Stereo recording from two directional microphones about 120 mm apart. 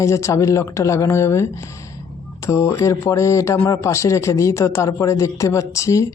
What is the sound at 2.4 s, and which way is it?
Speech, 20° left (ahead or behind).